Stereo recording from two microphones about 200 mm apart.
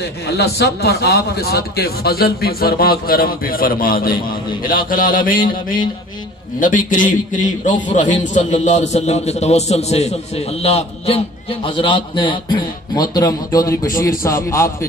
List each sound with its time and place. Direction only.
0.0 s a man's voice: 55° left (ahead or behind); by 14.9 s 15° left (ahead or behind)